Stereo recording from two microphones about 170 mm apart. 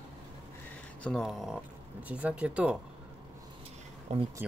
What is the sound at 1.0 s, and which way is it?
Speech, centre (ahead or behind).